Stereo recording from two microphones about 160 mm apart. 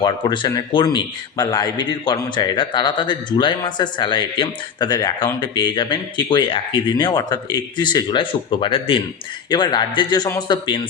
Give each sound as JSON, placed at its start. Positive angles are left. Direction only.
{"t": 0.0, "sound": "speech", "side_deg": 25}